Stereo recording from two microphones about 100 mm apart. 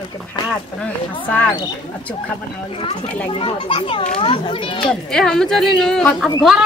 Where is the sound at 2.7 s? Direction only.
65° left (ahead or behind).